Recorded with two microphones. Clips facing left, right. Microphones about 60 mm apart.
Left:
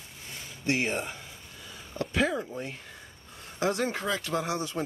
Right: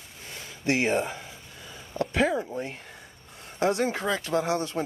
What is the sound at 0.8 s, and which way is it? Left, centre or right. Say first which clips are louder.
Speech: right 6 dB; right.